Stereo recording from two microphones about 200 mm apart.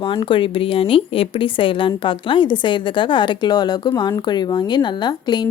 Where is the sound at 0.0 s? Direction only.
25° left (ahead or behind).